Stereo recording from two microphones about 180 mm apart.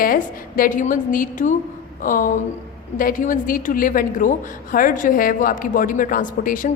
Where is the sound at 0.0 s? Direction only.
50° left (ahead or behind).